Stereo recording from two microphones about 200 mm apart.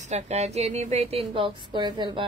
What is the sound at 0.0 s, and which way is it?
A woman's voice, 35° right (ahead or behind).